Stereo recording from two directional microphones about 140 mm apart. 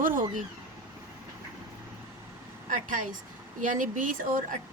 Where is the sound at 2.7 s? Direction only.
70° right (ahead or behind).